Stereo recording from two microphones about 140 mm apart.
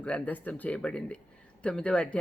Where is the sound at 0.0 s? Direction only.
10° left (ahead or behind).